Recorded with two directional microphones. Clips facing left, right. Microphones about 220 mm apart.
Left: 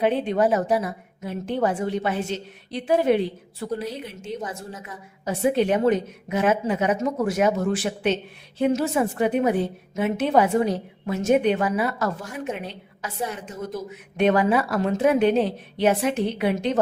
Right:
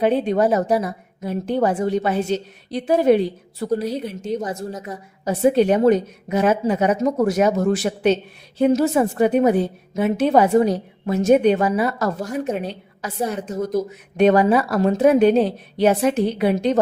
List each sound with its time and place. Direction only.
0.0 s a woman's voice: 40° right (ahead or behind)